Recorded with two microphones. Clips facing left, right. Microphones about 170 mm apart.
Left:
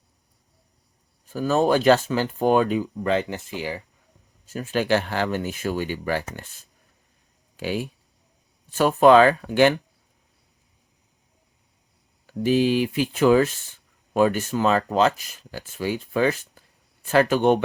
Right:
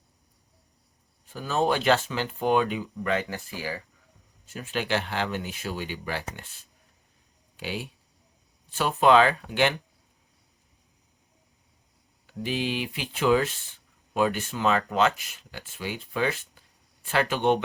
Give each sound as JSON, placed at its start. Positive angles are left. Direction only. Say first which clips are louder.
{"t": 1.3, "sound": "speech", "louder": "left 6 dB", "side_deg": 45}
{"t": 4.4, "sound": "speech", "louder": "left 7 dB", "side_deg": 40}
{"t": 7.5, "sound": "speech", "louder": "left 7 dB", "side_deg": 45}
{"t": 12.2, "sound": "speech", "louder": "left 10 dB", "side_deg": 45}